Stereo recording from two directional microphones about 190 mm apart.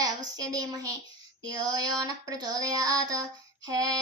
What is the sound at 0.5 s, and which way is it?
Child singing, 20° right (ahead or behind).